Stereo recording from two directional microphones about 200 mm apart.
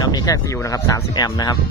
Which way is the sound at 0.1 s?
20° left (ahead or behind).